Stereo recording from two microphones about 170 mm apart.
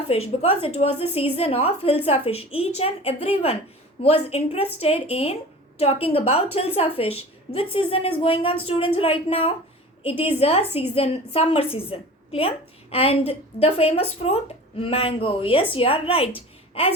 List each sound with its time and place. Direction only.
0.1 s a woman's voice: 35° left (ahead or behind)